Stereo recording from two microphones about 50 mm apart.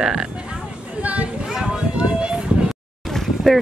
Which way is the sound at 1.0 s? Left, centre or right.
Right.